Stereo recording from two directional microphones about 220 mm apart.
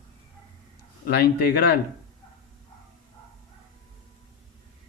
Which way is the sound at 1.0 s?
50° left (ahead or behind).